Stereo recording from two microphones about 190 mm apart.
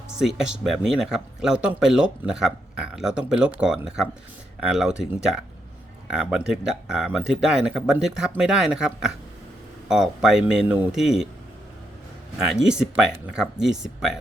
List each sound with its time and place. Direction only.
0.2 s speech: 5° right (ahead or behind)
12.4 s speech: 5° right (ahead or behind)